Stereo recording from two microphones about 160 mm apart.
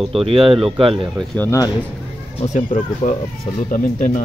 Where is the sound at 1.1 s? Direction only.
10° left (ahead or behind).